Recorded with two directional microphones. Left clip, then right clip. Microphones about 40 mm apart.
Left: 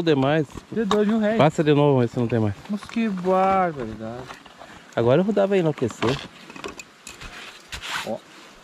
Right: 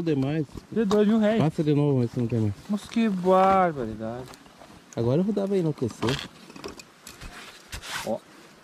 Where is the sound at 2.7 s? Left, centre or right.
Right.